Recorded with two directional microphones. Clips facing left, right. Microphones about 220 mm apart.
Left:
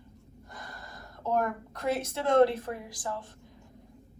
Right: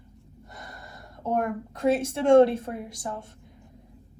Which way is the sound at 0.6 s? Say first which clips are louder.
Right 1 dB; 25° right (ahead or behind).